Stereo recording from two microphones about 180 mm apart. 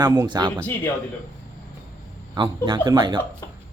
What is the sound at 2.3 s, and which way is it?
Speech, 25° right (ahead or behind).